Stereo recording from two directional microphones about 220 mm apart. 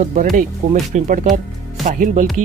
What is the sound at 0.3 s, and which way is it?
Speech, 35° right (ahead or behind).